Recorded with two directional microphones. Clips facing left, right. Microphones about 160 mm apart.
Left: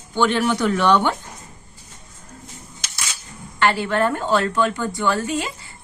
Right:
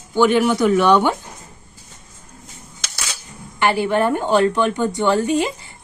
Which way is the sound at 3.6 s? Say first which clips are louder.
Right 2 dB; 15° right (ahead or behind).